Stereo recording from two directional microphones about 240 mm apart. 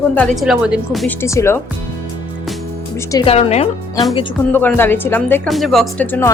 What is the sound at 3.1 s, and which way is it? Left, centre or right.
Speech, left.